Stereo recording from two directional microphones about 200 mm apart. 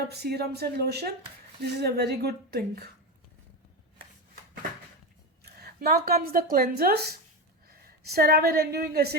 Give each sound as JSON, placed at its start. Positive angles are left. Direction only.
{"t": 0.1, "sound": "a woman's voice", "side_deg": -55}
{"t": 5.4, "sound": "a woman's voice", "side_deg": -50}